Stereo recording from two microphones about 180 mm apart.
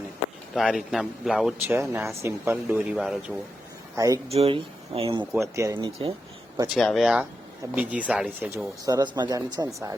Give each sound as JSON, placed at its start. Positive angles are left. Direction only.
{"t": 0.5, "sound": "speech", "side_deg": 0}
{"t": 1.7, "sound": "speech", "side_deg": -15}
{"t": 3.9, "sound": "speech", "side_deg": -20}
{"t": 4.3, "sound": "speech", "side_deg": -35}
{"t": 5.2, "sound": "speech", "side_deg": -10}
{"t": 6.7, "sound": "speech", "side_deg": 0}